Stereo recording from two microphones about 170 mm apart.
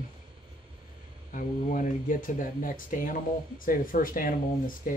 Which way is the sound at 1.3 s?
50° left (ahead or behind).